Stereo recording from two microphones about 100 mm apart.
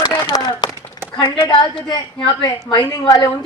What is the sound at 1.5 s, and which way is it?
A woman's voice, 50° left (ahead or behind).